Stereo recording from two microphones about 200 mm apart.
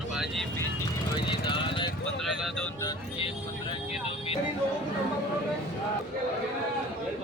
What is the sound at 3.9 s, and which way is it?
Vehicle, 30° left (ahead or behind).